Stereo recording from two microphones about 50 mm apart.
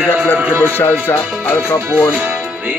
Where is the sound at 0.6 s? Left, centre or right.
Left.